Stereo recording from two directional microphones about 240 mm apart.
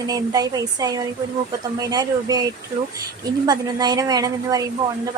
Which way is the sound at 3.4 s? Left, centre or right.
Centre.